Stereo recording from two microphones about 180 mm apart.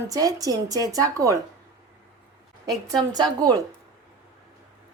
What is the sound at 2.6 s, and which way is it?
Speech, 20° right (ahead or behind).